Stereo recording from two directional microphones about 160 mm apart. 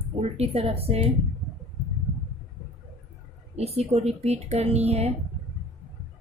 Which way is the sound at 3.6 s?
40° right (ahead or behind).